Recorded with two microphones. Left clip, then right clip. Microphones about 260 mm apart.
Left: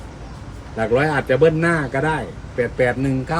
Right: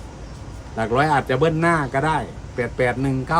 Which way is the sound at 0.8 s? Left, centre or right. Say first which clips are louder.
Even; right.